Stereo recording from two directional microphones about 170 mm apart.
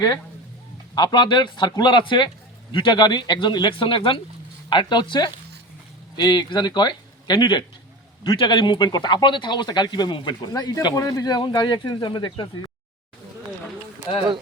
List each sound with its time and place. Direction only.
0.9 s speech: 25° left (ahead or behind)